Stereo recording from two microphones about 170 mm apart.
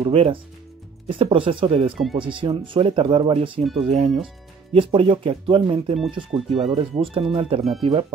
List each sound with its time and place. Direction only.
0.0 s speech: 35° right (ahead or behind)
1.9 s speech: centre (ahead or behind)
2.1 s speech: 30° right (ahead or behind)